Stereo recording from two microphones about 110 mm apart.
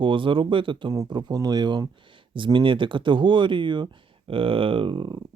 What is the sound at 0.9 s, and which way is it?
Speech, 40° right (ahead or behind).